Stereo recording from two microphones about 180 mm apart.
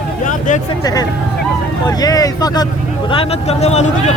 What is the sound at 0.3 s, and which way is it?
Speech, 45° left (ahead or behind).